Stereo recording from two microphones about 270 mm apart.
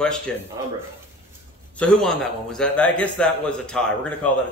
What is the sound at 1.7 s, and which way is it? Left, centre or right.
A man's voice, centre.